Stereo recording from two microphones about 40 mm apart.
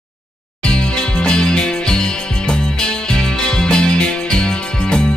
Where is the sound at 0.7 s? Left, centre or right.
Left.